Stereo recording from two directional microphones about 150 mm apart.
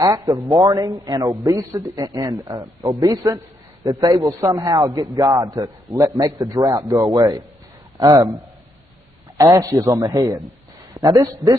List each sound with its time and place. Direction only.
0.0 s a man's voice: 20° right (ahead or behind)
9.4 s a man's voice: 20° right (ahead or behind)